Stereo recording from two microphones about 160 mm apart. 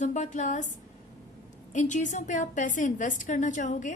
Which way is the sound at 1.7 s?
50° left (ahead or behind).